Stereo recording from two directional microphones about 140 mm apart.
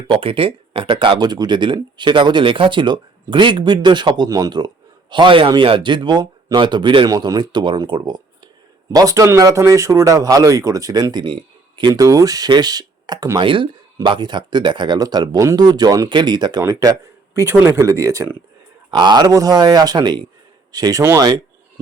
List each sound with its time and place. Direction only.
0.1 s speech: 40° right (ahead or behind); by 13.4 s 25° right (ahead or behind)
13.4 s speech: 35° right (ahead or behind); by 18.3 s 20° right (ahead or behind)
18.9 s speech: 30° right (ahead or behind)